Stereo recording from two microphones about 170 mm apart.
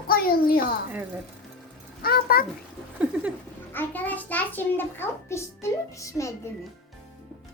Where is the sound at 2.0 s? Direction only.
60° left (ahead or behind).